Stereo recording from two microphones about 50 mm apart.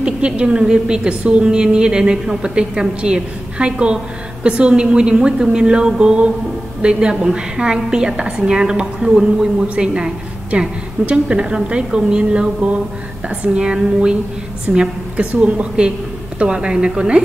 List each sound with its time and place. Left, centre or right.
0.0 s a woman's voice: centre
10.5 s a woman's voice: right